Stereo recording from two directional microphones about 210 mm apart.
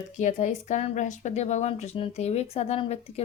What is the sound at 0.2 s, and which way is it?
Speech, 35° left (ahead or behind).